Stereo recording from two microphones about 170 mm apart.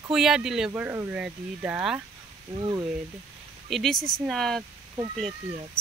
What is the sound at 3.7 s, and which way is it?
Speech, centre (ahead or behind).